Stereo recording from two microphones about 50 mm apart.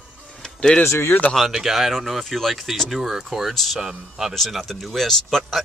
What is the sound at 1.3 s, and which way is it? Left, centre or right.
Speech, centre.